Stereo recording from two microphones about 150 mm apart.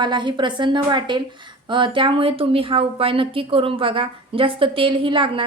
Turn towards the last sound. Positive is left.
turn(degrees=-35)  # may be behind; listen again after turning